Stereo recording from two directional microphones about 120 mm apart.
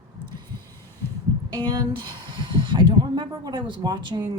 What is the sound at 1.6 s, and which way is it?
Speech, 40° right (ahead or behind).